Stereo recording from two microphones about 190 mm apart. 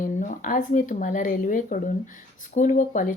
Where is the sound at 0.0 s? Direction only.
45° left (ahead or behind).